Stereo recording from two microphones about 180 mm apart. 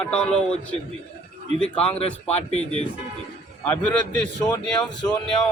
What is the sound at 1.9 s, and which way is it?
Speech, 35° left (ahead or behind).